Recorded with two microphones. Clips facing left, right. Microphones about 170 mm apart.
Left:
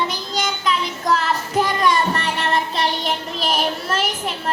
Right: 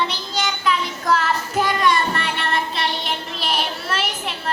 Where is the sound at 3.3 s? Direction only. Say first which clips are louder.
Left 3 dB; 45° left (ahead or behind).